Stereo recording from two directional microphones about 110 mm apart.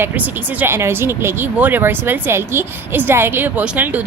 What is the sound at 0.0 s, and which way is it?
Speech, 15° right (ahead or behind).